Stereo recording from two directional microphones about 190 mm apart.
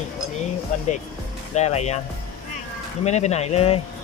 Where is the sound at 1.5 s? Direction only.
35° left (ahead or behind).